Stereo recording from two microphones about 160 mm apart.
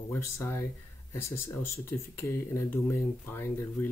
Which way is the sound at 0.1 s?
15° left (ahead or behind).